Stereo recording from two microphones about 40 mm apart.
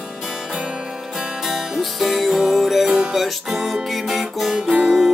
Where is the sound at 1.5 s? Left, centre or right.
Centre.